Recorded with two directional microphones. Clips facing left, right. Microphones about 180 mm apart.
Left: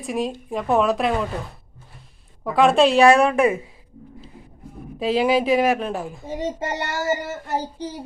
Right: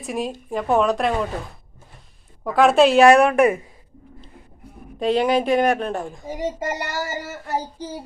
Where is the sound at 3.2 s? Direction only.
25° left (ahead or behind).